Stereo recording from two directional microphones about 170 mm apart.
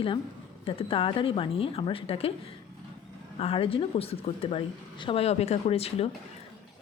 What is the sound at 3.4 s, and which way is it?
Speech, 35° left (ahead or behind).